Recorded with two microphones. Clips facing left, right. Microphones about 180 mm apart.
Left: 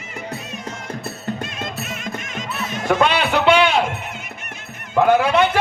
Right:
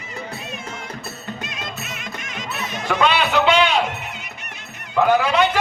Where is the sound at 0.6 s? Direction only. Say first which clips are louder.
Left 3 dB; 50° left (ahead or behind).